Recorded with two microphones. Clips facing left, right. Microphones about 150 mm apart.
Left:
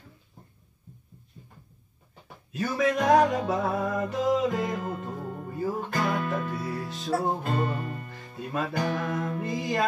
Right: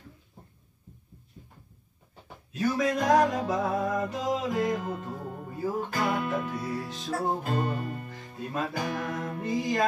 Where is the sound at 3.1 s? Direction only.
Centre (ahead or behind).